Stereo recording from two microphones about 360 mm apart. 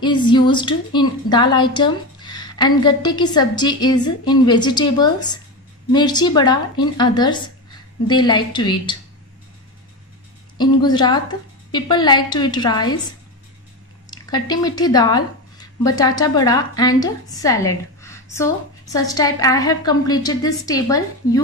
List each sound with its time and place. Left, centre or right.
0.0 s a woman's voice: centre
10.6 s a woman's voice: centre
14.1 s a woman's voice: centre